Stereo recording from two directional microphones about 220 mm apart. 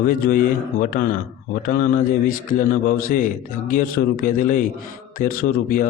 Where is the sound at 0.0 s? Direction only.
40° left (ahead or behind).